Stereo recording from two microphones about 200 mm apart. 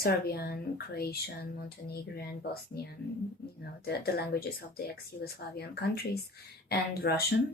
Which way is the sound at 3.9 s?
50° left (ahead or behind).